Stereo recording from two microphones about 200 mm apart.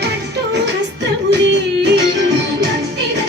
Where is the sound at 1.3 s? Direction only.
60° right (ahead or behind).